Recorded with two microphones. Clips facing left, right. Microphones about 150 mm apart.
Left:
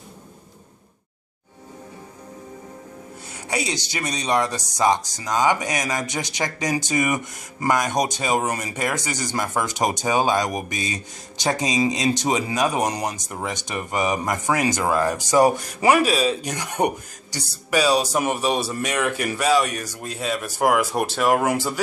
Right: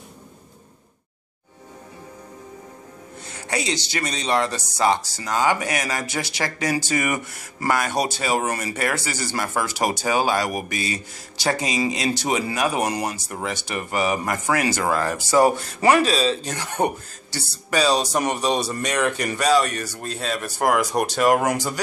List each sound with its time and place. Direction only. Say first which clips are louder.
3.4 s speech: right 1 dB; 10° left (ahead or behind)